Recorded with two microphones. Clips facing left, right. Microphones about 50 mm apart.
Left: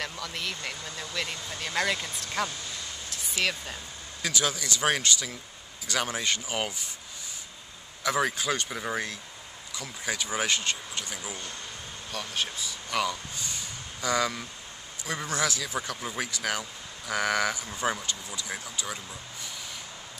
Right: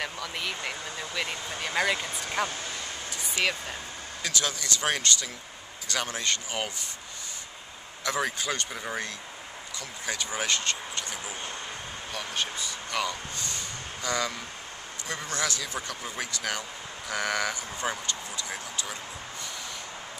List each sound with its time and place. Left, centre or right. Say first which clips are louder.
0.0 s speech: right 1 dB; centre
3.1 s vehicle: right 1 dB; centre
4.2 s speech: left 2 dB; centre
8.0 s speech: left 2 dB; centre
12.1 s speech: even; centre